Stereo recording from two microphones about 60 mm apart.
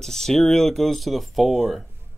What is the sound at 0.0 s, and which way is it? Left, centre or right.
Speech, centre.